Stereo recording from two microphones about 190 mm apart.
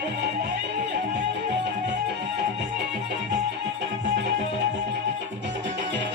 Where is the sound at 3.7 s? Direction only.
70° right (ahead or behind).